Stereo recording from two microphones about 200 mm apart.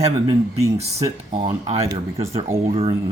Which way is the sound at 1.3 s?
30° right (ahead or behind).